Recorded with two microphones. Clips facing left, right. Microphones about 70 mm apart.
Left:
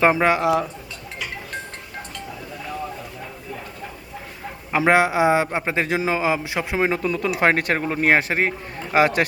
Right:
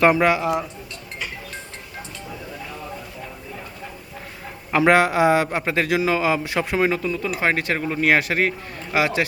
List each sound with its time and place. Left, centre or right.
0.0 s a man's voice: left
4.7 s a man's voice: centre
7.0 s speech: left
9.0 s speech: left